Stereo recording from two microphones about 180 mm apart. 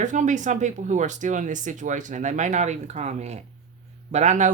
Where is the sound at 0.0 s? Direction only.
45° right (ahead or behind).